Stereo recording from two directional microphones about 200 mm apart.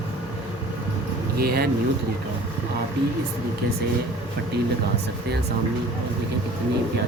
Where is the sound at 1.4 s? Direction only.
50° right (ahead or behind).